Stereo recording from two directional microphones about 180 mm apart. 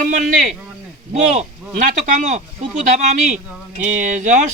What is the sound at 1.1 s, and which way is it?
Speech, 40° right (ahead or behind).